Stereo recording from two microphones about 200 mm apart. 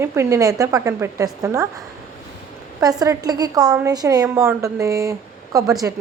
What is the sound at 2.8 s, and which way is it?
A woman's voice, 20° right (ahead or behind).